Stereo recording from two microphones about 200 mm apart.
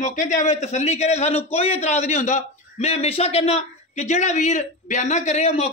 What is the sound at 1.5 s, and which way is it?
A man's voice, 30° left (ahead or behind).